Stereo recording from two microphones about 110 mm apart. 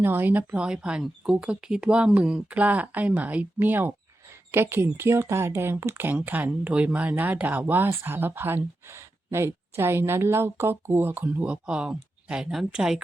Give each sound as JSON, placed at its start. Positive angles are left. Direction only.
{"t": 0.0, "sound": "speech", "side_deg": -20}